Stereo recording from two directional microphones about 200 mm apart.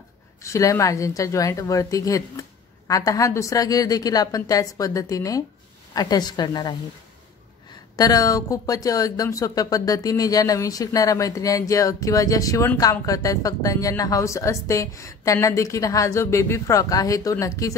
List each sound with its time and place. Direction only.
0.4 s a woman's voice: 15° left (ahead or behind)
7.9 s speech: 20° left (ahead or behind)